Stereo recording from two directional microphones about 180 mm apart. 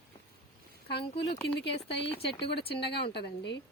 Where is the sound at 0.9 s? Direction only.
70° left (ahead or behind).